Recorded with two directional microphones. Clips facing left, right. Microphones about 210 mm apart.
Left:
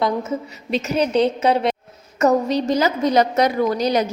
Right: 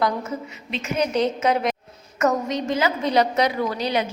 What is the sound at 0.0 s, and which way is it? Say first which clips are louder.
Speech: left 3 dB; 25° left (ahead or behind).